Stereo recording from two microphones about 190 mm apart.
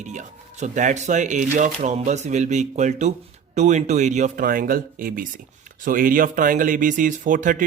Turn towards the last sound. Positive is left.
turn(degrees=-45)  # may be behind; listen again after turning